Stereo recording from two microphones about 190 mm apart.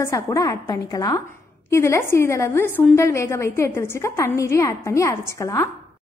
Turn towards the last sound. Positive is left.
turn(degrees=15)  # may be behind; listen again after turning